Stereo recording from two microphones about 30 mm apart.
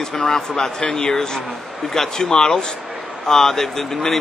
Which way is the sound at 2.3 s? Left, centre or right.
Left.